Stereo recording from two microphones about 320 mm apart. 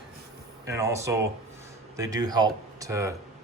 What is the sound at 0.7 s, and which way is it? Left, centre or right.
Speech, centre.